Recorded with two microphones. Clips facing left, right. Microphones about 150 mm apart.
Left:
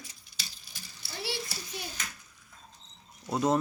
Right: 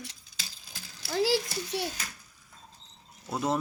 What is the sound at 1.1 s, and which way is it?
Speech, 90° right.